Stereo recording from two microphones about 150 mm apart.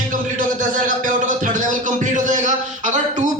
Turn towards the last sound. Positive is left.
turn(degrees=-55)  # may be behind; listen again after turning